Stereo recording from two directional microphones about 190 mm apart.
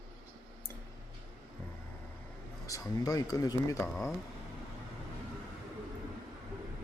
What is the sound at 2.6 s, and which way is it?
Speech, 15° left (ahead or behind).